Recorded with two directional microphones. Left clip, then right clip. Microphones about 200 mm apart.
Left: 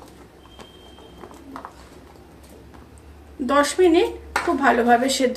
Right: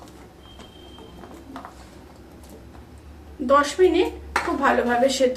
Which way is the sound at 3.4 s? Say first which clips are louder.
Even; 50° left (ahead or behind).